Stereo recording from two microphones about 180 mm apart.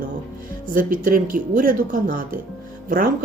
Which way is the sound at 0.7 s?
50° right (ahead or behind).